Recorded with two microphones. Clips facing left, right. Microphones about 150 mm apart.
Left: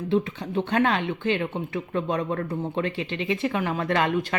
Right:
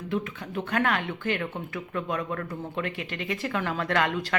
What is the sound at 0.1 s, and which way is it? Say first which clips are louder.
Speech: left 6 dB; 30° left (ahead or behind).